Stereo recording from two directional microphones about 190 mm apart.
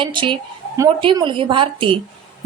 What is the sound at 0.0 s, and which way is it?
A woman's voice, 25° right (ahead or behind).